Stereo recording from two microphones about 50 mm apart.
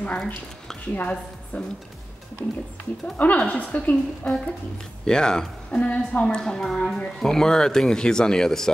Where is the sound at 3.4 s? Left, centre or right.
Left.